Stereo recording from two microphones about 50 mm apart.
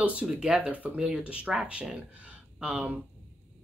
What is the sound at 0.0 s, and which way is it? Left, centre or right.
Speech, right.